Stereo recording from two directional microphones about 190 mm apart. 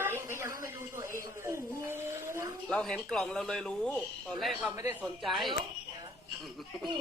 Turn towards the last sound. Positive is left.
turn(degrees=0)  # may be behind; listen again after turning